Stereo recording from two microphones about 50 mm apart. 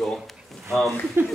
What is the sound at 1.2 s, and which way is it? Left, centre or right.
Speech, right.